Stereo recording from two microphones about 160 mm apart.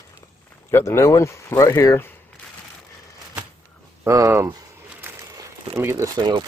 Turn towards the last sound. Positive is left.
turn(degrees=-25)  # may be behind; listen again after turning